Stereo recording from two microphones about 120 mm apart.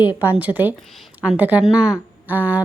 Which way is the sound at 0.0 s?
15° right (ahead or behind).